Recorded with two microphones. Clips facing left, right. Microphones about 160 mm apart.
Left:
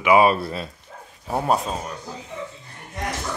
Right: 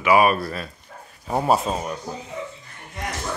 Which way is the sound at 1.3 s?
5° right (ahead or behind).